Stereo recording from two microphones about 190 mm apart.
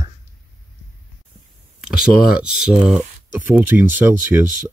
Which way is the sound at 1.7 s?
5° right (ahead or behind).